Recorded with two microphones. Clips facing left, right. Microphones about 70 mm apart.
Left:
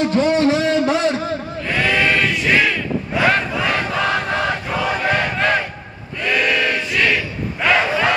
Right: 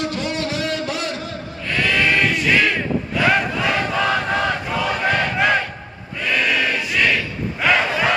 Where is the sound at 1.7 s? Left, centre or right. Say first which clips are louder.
Left 1 dB; centre.